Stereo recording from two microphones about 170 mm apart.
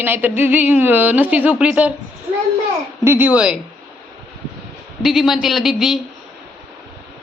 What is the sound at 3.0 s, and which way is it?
Speech, 10° right (ahead or behind).